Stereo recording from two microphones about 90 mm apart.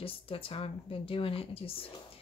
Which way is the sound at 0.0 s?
90° left.